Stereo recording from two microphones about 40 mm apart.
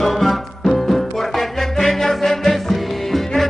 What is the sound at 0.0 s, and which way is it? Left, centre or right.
Music, centre.